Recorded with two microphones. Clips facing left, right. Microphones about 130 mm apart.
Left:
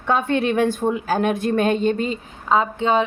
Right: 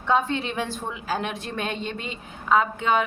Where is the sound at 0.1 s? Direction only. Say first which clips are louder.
Left 4 dB; 55° left (ahead or behind).